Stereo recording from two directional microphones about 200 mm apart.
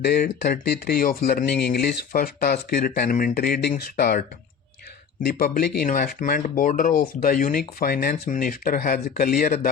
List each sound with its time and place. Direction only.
0.0 s speech: 55° left (ahead or behind)
5.2 s speech: 45° left (ahead or behind)